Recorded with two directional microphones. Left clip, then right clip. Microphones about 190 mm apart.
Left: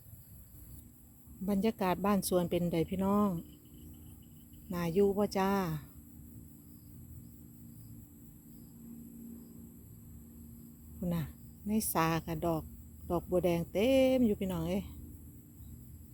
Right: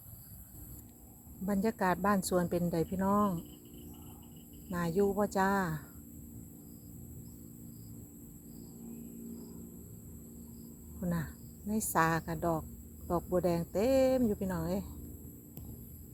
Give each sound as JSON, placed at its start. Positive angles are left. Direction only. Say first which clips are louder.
{"t": 1.5, "sound": "speech", "louder": "right 1 dB", "side_deg": 30}
{"t": 4.7, "sound": "speech", "louder": "left 1 dB", "side_deg": 30}
{"t": 11.0, "sound": "speech", "louder": "right 1 dB", "side_deg": 25}